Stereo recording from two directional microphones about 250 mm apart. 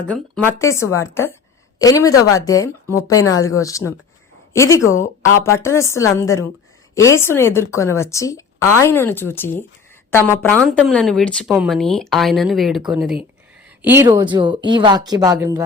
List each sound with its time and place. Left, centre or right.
0.3 s a woman's voice: centre